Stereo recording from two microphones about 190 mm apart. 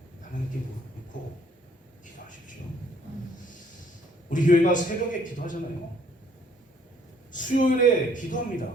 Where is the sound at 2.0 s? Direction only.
40° left (ahead or behind).